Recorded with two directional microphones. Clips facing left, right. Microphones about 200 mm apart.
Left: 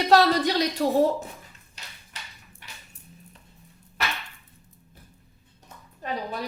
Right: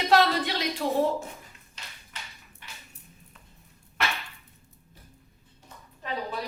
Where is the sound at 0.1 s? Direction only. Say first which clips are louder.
Left 3 dB; 40° left (ahead or behind).